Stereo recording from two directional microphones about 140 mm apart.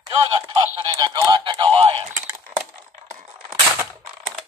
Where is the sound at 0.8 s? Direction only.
30° right (ahead or behind).